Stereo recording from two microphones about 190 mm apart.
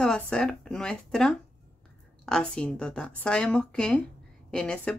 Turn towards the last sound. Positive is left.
turn(degrees=5)  # may be behind; listen again after turning